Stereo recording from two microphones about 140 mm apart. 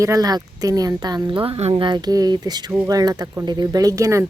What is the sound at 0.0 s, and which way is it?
A woman's voice, 25° right (ahead or behind).